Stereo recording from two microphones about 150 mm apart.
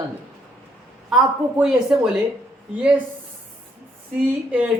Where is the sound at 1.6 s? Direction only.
5° right (ahead or behind).